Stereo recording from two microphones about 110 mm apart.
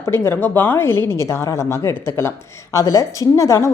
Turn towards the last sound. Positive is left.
turn(degrees=25)  # may be behind; listen again after turning